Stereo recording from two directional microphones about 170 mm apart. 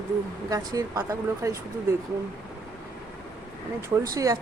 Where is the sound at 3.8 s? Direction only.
20° right (ahead or behind).